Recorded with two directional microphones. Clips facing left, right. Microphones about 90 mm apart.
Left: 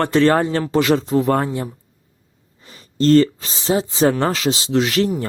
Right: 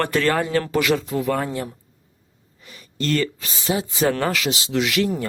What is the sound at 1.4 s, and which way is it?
Speech, 20° left (ahead or behind).